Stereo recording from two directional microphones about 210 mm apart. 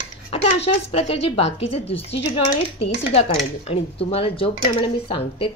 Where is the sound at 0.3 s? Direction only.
25° left (ahead or behind).